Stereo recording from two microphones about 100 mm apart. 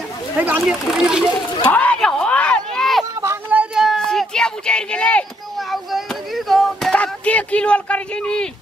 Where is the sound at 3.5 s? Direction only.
15° right (ahead or behind).